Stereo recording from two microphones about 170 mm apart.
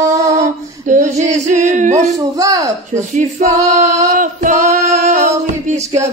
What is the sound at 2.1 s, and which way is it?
Speech, 20° right (ahead or behind).